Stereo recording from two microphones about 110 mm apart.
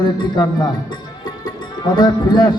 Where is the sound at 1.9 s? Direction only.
40° left (ahead or behind).